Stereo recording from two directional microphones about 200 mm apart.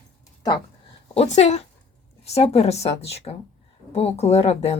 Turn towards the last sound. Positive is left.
turn(degrees=30)  # may be behind; listen again after turning